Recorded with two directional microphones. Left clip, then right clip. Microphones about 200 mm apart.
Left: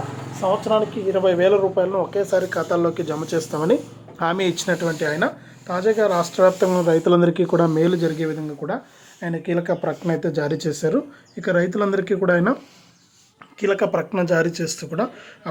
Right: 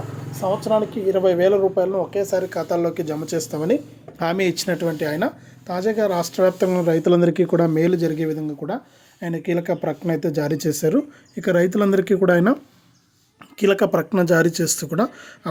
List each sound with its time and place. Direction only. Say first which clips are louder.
0.7 s speech: even; 35° right (ahead or behind)
13.6 s speech: right 2 dB; 50° right (ahead or behind)